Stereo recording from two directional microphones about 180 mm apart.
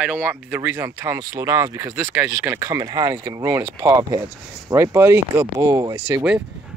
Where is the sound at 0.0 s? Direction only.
5° right (ahead or behind).